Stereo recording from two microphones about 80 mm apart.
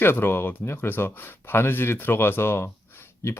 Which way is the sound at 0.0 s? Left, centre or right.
Left.